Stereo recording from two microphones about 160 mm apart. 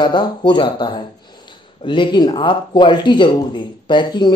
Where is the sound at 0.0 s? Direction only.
30° left (ahead or behind).